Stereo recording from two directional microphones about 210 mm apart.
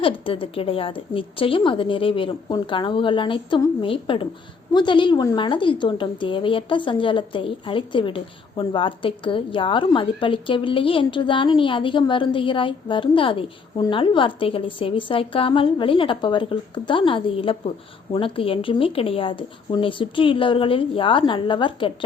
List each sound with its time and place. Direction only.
0.0 s a woman's voice: 25° left (ahead or behind)